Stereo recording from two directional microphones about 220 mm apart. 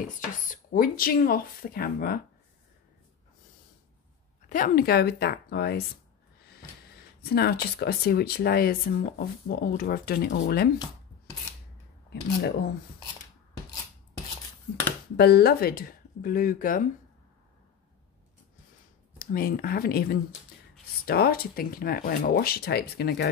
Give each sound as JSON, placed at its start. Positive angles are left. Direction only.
{"t": 0.5, "sound": "speech", "side_deg": 40}
{"t": 4.5, "sound": "speech", "side_deg": 40}
{"t": 7.2, "sound": "speech", "side_deg": 45}
{"t": 12.1, "sound": "speech", "side_deg": 50}
{"t": 15.1, "sound": "speech", "side_deg": 45}
{"t": 19.1, "sound": "speech", "side_deg": 40}